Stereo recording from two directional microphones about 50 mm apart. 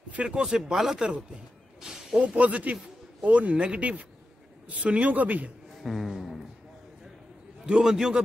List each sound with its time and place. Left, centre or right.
0.1 s speech: right
2.1 s a man's voice: right
5.8 s music: centre
7.6 s a man's voice: centre